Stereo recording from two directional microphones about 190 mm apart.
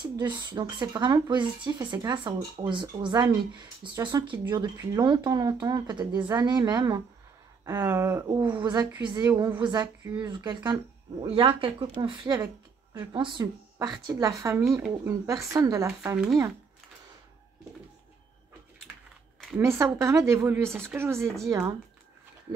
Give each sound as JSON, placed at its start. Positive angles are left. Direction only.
{"t": 0.0, "sound": "a woman's voice", "side_deg": -25}
{"t": 19.6, "sound": "a woman's voice", "side_deg": -15}